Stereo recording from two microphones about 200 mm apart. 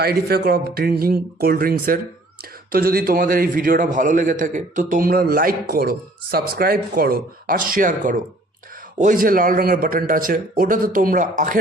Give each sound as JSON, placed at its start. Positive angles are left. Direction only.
{"t": 0.0, "sound": "a man's voice", "side_deg": -50}